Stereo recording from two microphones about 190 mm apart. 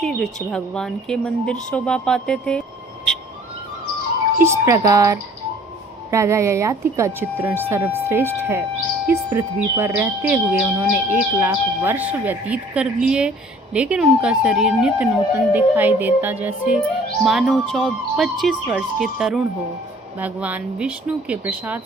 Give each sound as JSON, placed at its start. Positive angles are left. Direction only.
{"t": 0.0, "sound": "speech", "side_deg": 0}
{"t": 4.4, "sound": "speech", "side_deg": -15}